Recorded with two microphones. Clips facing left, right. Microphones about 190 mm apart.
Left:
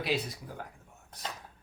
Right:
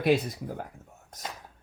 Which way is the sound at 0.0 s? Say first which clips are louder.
Right 8 dB; 50° right (ahead or behind).